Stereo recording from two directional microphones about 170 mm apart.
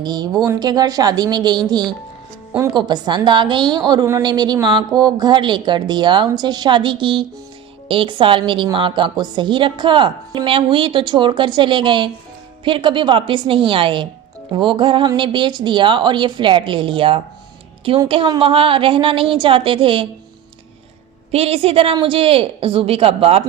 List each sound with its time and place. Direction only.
0.0 s a woman's voice: 25° right (ahead or behind)
21.3 s a woman's voice: 35° right (ahead or behind)